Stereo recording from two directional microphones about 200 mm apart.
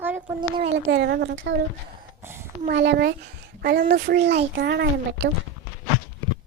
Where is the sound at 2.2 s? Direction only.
10° right (ahead or behind).